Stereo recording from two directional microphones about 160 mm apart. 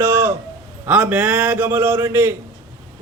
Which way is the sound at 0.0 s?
15° right (ahead or behind).